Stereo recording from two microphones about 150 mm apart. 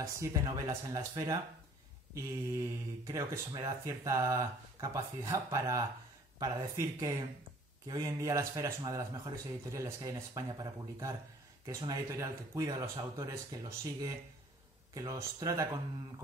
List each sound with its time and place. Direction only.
0.2 s speech: 20° right (ahead or behind)
3.1 s speech: 20° right (ahead or behind)